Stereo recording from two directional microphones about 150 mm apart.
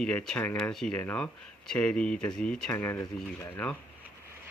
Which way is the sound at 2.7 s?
15° left (ahead or behind).